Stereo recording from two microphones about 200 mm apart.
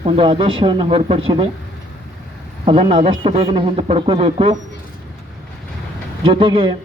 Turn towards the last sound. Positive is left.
turn(degrees=-25)  # may be behind; listen again after turning